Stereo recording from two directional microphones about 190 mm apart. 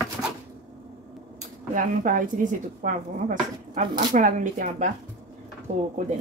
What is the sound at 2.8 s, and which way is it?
Speech, 40° right (ahead or behind).